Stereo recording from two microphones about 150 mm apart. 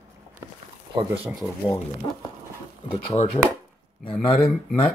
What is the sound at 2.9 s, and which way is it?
Speech, 45° left (ahead or behind).